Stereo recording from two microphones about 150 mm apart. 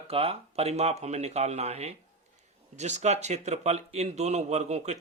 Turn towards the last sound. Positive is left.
turn(degrees=-50)  # may be behind; listen again after turning